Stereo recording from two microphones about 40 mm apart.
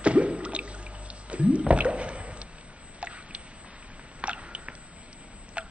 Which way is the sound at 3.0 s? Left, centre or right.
Right.